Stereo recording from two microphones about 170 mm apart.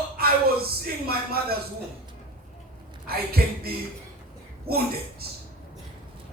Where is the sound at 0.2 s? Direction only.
65° right (ahead or behind).